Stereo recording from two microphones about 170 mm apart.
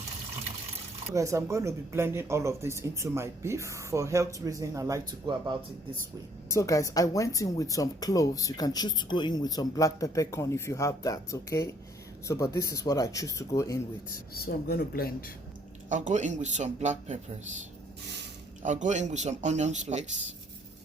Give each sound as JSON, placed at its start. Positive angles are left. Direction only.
{"t": 1.1, "sound": "speech", "side_deg": -20}
{"t": 6.5, "sound": "speech", "side_deg": 20}
{"t": 14.3, "sound": "speech", "side_deg": 60}
{"t": 15.9, "sound": "speech", "side_deg": -45}
{"t": 18.6, "sound": "speech", "side_deg": -45}